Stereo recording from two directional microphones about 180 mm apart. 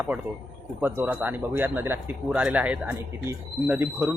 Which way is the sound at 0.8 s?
10° right (ahead or behind).